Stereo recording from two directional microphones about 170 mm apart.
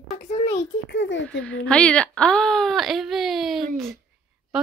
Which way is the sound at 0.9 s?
90° left.